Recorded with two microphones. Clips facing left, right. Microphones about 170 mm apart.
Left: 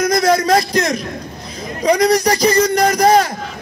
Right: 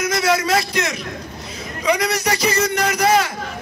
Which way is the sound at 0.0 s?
40° left (ahead or behind).